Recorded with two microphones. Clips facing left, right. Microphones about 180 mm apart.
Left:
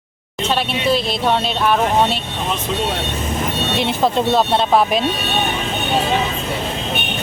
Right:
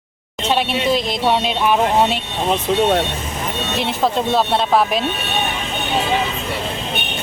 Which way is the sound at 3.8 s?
Centre (ahead or behind).